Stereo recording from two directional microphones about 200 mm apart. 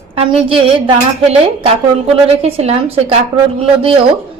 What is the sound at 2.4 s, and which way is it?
Speech, 30° right (ahead or behind).